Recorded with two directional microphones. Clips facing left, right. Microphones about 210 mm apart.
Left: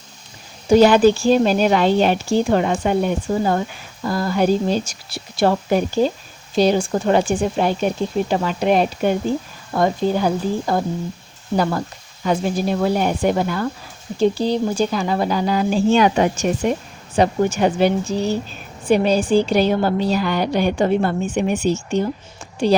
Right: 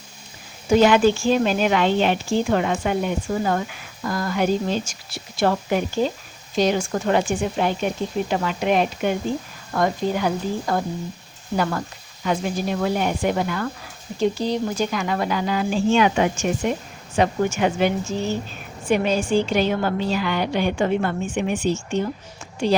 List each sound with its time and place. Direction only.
0.7 s speech: 35° left (ahead or behind)